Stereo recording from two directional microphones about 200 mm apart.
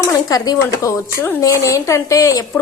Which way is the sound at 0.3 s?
20° left (ahead or behind).